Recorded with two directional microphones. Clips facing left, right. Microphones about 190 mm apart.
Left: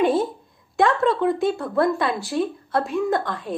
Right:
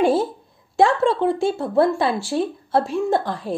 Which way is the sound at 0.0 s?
30° right (ahead or behind).